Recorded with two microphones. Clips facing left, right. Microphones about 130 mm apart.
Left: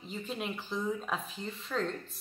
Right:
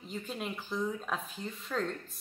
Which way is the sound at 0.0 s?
Centre (ahead or behind).